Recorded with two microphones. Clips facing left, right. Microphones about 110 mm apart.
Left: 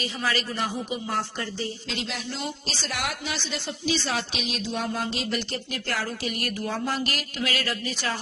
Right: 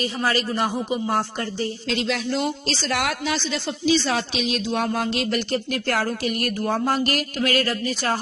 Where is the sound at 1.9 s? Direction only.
90° right.